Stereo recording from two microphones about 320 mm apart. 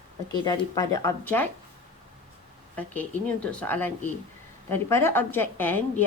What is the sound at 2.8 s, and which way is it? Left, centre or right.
A woman's voice, centre.